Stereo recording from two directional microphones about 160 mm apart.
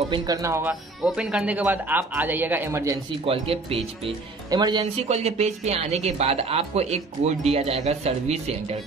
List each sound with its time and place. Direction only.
0.1 s speech: 20° right (ahead or behind)
1.0 s speech: 5° right (ahead or behind)
3.3 s speech: 35° right (ahead or behind)
4.9 s speech: 40° right (ahead or behind)